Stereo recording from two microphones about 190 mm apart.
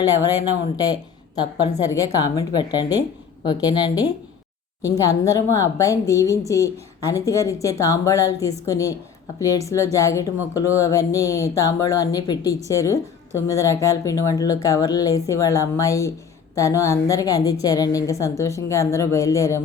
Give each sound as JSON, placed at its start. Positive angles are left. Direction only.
{"t": 0.0, "sound": "speech", "side_deg": 20}
{"t": 1.4, "sound": "a woman's voice", "side_deg": 20}